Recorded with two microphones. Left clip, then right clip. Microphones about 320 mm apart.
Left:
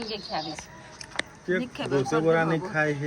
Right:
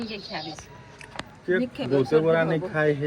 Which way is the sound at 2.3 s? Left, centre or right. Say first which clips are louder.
Right 1 dB; right.